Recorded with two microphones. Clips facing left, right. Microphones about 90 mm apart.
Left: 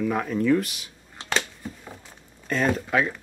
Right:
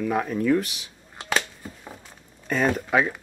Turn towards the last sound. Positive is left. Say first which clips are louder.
# right 1 dB
turn(degrees=-5)  # may be behind; listen again after turning